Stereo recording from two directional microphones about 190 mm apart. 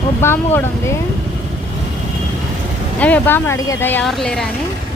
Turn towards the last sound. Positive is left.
turn(degrees=0)  # may be behind; listen again after turning